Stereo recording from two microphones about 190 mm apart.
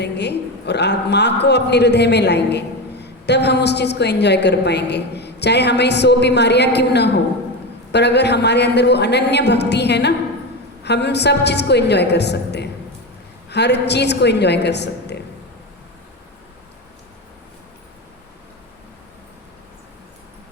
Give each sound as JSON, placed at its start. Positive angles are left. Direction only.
{"t": 0.0, "sound": "a man's voice", "side_deg": 60}